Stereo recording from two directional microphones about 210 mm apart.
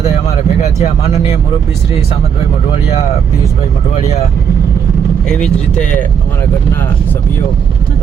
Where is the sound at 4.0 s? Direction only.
30° left (ahead or behind).